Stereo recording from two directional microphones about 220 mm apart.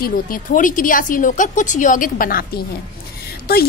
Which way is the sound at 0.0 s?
40° left (ahead or behind).